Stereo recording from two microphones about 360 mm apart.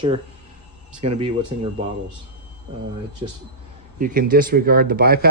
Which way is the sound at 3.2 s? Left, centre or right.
Centre.